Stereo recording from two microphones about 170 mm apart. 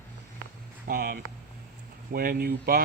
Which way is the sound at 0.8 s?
60° right (ahead or behind).